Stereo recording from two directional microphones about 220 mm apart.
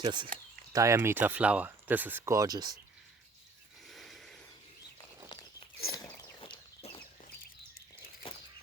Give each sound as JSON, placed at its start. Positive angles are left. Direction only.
{"t": 0.0, "sound": "speech", "side_deg": -20}
{"t": 3.8, "sound": "a sound", "side_deg": 0}
{"t": 5.3, "sound": "crunch", "side_deg": 20}
{"t": 5.9, "sound": "biting", "side_deg": 15}
{"t": 6.4, "sound": "walk", "side_deg": 25}